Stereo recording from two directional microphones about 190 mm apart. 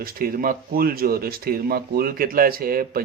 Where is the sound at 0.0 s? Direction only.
50° right (ahead or behind).